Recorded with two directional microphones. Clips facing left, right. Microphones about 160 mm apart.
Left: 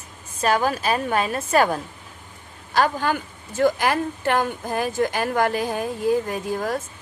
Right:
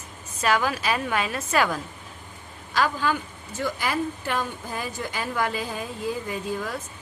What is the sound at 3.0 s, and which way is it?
Speech, 55° left (ahead or behind).